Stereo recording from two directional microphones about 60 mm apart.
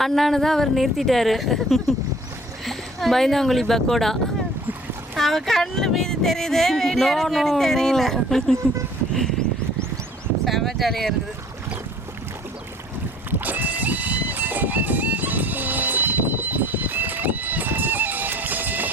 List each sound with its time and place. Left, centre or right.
0.0 s speech: centre
10.4 s speech: centre
13.4 s music: right